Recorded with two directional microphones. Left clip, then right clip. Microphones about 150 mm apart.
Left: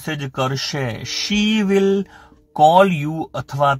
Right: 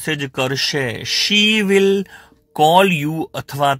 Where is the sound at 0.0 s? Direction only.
15° right (ahead or behind).